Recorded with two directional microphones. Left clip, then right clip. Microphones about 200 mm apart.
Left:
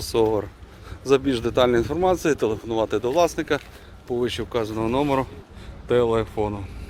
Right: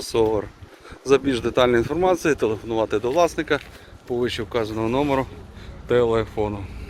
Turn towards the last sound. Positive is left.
turn(degrees=10)  # may be behind; listen again after turning